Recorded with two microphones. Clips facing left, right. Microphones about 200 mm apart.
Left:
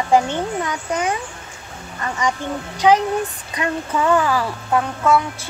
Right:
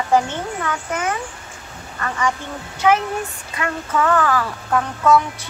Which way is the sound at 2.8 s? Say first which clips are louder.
Left 2 dB; 20° left (ahead or behind).